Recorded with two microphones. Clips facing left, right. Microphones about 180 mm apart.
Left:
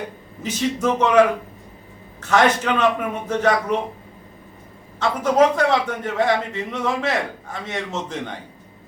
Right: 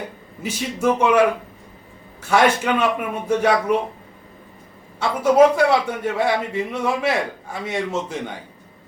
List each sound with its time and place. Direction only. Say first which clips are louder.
0.4 s a man's voice: even; 10° right (ahead or behind)
2.2 s a man's voice: even; 10° right (ahead or behind)
4.9 s a man's voice: right 3 dB; 10° right (ahead or behind)